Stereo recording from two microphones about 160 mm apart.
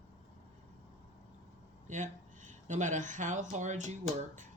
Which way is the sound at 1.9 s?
50° right (ahead or behind).